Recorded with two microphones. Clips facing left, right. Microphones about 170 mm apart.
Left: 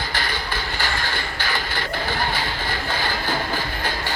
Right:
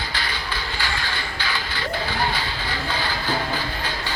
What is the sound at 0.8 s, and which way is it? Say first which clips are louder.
Music: left 2 dB; 45° left (ahead or behind).